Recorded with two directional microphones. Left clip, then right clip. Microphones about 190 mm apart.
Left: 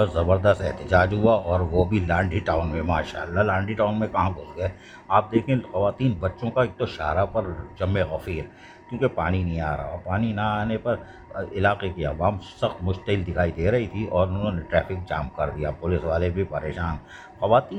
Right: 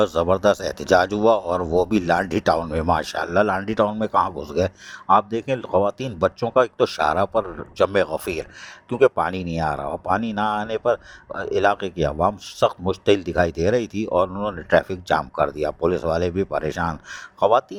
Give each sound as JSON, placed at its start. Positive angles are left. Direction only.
{"t": 0.0, "sound": "speech", "side_deg": -45}